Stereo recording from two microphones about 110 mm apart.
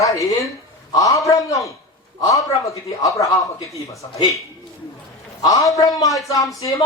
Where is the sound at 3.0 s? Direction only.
30° left (ahead or behind).